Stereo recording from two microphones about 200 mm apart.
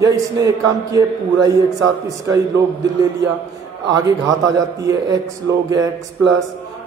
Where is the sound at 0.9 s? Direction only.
15° right (ahead or behind).